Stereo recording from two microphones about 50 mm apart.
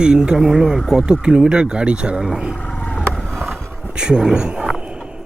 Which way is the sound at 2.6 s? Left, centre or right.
Left.